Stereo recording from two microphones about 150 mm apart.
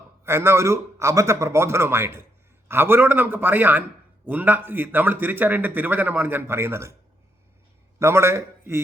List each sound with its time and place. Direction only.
0.3 s a man's voice: 15° right (ahead or behind)
7.9 s a man's voice: 15° right (ahead or behind)